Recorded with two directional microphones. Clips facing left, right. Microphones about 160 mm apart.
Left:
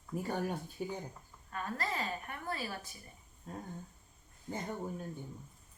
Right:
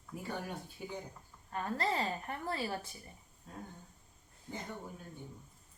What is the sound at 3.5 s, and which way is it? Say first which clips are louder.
Speech: left 4 dB; 50° left (ahead or behind).